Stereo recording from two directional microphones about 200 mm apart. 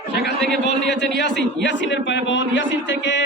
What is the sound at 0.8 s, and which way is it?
A man's voice, 60° left (ahead or behind).